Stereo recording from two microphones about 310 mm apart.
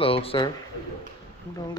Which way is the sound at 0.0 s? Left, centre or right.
Centre.